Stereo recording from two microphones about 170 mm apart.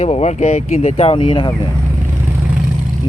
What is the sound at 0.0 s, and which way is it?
Speech, 40° left (ahead or behind).